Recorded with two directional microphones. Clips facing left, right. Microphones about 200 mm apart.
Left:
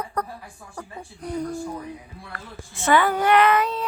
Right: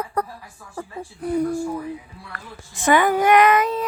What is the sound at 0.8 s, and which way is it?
Speech, 5° right (ahead or behind).